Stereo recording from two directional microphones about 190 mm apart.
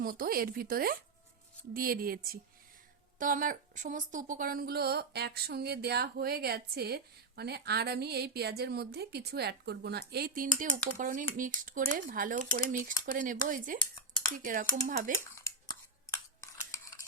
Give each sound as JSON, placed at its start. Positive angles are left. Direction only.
{"t": 0.0, "sound": "a woman's voice", "side_deg": -50}
{"t": 15.4, "sound": "scissors", "side_deg": 15}
{"t": 16.1, "sound": "stir", "side_deg": 15}